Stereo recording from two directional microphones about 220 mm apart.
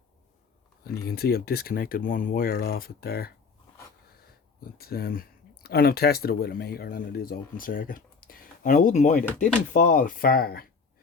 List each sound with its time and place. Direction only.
1.0 s speech: 45° left (ahead or behind)